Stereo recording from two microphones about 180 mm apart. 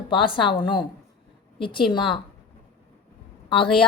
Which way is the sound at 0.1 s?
30° left (ahead or behind).